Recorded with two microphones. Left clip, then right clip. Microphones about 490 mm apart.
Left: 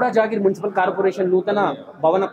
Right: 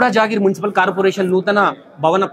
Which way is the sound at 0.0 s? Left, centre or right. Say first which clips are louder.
Right 3 dB; centre.